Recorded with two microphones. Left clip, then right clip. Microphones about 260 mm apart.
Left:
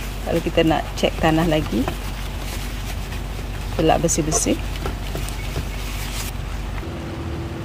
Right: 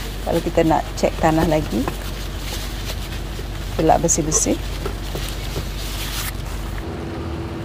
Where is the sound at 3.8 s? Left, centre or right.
Centre.